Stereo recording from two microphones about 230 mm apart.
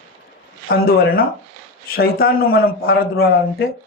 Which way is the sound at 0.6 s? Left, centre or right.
Left.